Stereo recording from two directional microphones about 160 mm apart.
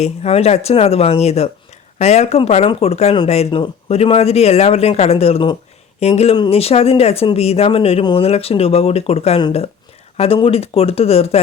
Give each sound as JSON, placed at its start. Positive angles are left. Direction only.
{"t": 0.0, "sound": "speech", "side_deg": 40}